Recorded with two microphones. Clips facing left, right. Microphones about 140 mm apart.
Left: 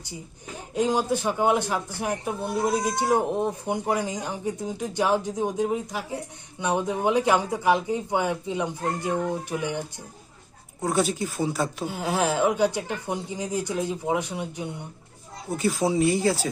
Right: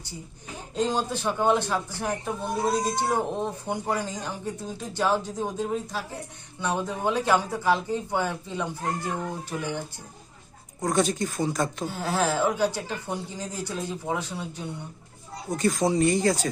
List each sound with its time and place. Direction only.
0.7 s speech: 10° left (ahead or behind)
10.8 s speech: 5° left (ahead or behind)
15.4 s speech: 5° left (ahead or behind)